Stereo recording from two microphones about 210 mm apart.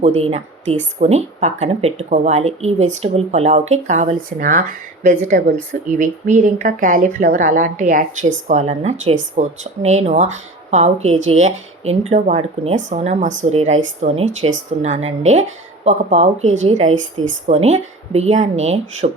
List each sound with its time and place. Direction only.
0.0 s speech: 30° right (ahead or behind)